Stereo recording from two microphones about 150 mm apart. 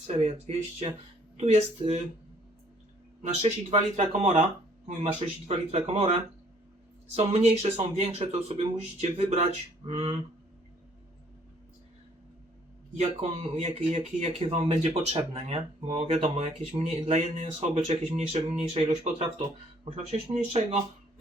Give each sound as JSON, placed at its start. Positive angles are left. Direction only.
{"t": 0.2, "sound": "speech", "side_deg": -45}
{"t": 3.2, "sound": "speech", "side_deg": -45}
{"t": 13.0, "sound": "speech", "side_deg": -40}